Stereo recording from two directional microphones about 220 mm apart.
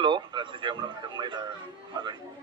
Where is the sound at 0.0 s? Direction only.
20° right (ahead or behind).